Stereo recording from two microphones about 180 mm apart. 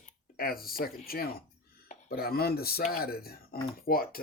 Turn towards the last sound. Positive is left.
turn(degrees=55)  # may be behind; listen again after turning